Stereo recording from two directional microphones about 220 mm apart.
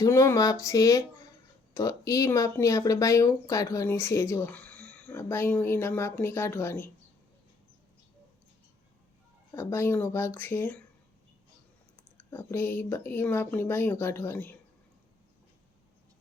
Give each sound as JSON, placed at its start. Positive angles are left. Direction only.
{"t": 0.0, "sound": "speech", "side_deg": 15}
{"t": 9.6, "sound": "speech", "side_deg": 10}
{"t": 12.3, "sound": "speech", "side_deg": 10}